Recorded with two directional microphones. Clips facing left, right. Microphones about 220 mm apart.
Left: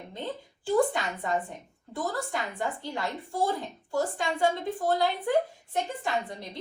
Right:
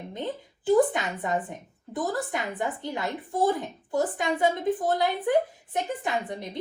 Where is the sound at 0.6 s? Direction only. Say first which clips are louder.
Right 4 dB; 20° right (ahead or behind).